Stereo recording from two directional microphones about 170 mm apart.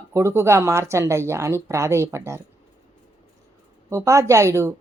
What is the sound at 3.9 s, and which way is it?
Speech, 15° right (ahead or behind).